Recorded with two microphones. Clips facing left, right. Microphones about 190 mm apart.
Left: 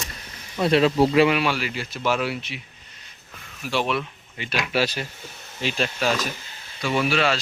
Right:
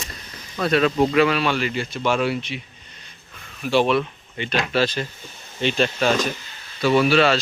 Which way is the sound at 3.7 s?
30° right (ahead or behind).